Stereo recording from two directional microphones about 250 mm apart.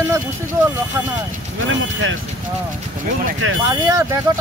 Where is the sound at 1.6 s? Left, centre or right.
Right.